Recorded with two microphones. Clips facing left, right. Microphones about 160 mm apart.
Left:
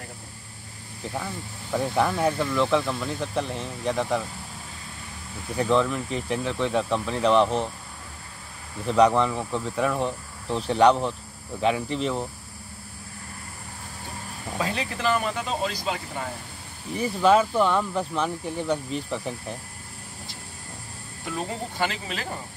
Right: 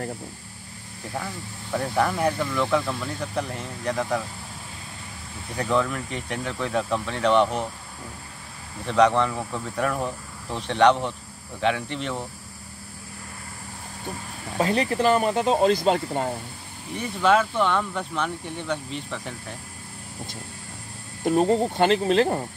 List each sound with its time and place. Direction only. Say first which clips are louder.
1.1 s speech: right 1 dB; 5° left (ahead or behind)
5.7 s speech: left 1 dB; centre (ahead or behind)
8.8 s speech: even; 5° left (ahead or behind)
14.6 s speech: right 6 dB; 40° right (ahead or behind)
15.3 s speech: right 9 dB; 55° right (ahead or behind)
17.0 s speech: left 1 dB; 5° left (ahead or behind)
18.9 s speech: left 3 dB; 35° left (ahead or behind)
21.2 s speech: right 11 dB; 60° right (ahead or behind)